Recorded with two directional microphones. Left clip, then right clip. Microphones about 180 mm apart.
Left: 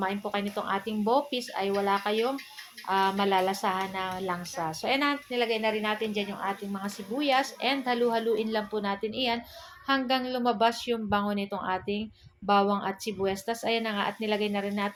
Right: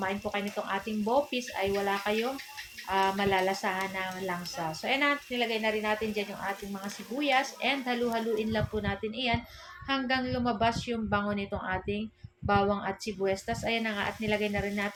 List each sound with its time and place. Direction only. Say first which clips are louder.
0.0 s a woman's voice: left 2 dB; 35° left (ahead or behind)